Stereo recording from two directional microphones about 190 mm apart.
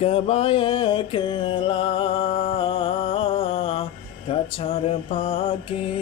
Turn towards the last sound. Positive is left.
turn(degrees=30)  # may be behind; listen again after turning